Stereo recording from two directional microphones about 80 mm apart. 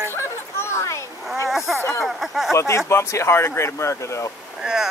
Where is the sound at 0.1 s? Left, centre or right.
Left.